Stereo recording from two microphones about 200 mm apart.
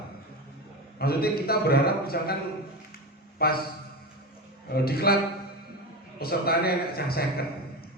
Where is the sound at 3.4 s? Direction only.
50° left (ahead or behind).